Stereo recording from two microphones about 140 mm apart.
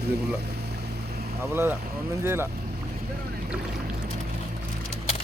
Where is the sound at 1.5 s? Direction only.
15° right (ahead or behind).